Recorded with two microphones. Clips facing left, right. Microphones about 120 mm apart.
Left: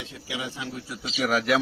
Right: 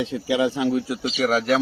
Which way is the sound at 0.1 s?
70° right (ahead or behind).